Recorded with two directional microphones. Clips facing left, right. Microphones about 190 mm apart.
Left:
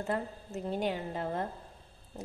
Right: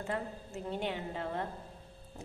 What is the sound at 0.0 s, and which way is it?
Speech, 40° left (ahead or behind).